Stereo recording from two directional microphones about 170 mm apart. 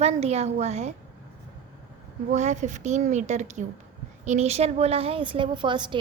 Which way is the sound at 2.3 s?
45° right (ahead or behind).